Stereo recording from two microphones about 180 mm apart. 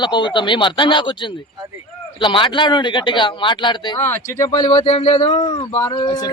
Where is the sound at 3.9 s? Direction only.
15° left (ahead or behind).